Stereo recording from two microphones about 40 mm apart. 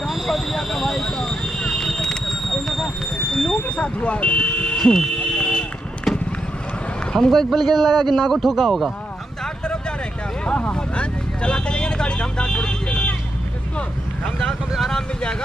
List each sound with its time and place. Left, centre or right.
0.0 s vehicle: centre
1.0 s a sound: centre
1.4 s fireworks: centre
2.5 s a sound: centre
3.6 s speech: left
4.8 s a sound: centre
6.1 s clip-clop: centre
7.2 s speech: centre
7.5 s a man's voice: centre
8.1 s a man's voice: centre
10.4 s vehicle: left
14.9 s vehicle: centre